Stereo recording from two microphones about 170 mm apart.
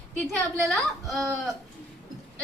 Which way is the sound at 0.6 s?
Centre (ahead or behind).